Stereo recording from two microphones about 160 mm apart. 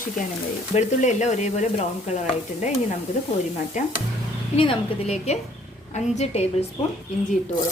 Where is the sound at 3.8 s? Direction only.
50° left (ahead or behind).